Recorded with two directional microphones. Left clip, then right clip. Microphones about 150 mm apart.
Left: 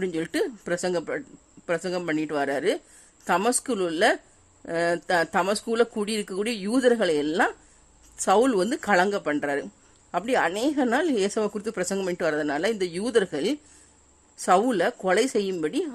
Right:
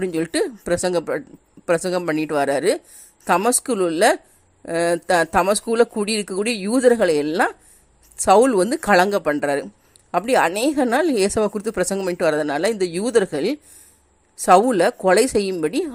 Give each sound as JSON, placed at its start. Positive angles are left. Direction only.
{"t": 0.0, "sound": "speech", "side_deg": -15}